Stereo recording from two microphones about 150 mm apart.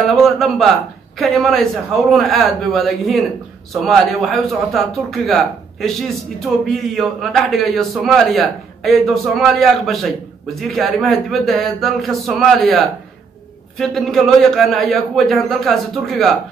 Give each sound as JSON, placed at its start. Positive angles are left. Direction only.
{"t": 0.0, "sound": "a man's voice", "side_deg": 0}